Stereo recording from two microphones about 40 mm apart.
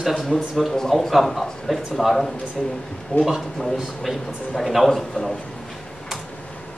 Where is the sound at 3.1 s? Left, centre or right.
Left.